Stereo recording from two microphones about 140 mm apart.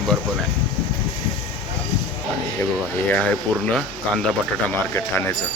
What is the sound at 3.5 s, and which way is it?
Speech, 35° right (ahead or behind).